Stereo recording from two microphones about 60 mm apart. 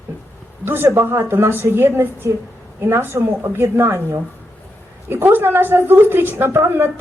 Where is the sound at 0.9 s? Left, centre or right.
Right.